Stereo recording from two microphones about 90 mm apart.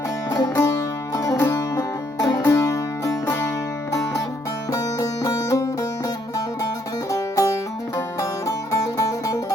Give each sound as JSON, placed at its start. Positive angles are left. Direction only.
{"t": 0.3, "sound": "music", "side_deg": 40}
{"t": 4.7, "sound": "music", "side_deg": 40}
{"t": 7.1, "sound": "music", "side_deg": 40}